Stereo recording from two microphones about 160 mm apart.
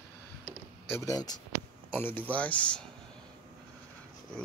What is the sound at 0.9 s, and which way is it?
Speech, 20° left (ahead or behind).